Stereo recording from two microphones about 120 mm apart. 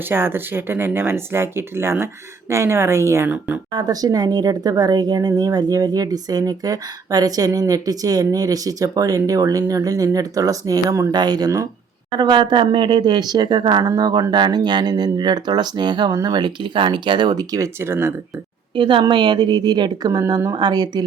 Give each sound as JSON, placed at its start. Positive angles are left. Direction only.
{"t": 0.1, "sound": "speech", "side_deg": -20}
{"t": 3.2, "sound": "speech", "side_deg": -15}
{"t": 3.7, "sound": "a woman's voice", "side_deg": -35}
{"t": 18.8, "sound": "a woman's voice", "side_deg": -45}